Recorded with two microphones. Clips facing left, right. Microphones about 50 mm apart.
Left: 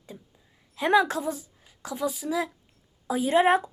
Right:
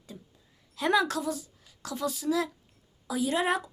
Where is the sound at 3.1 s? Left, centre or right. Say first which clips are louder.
Left 6 dB; left.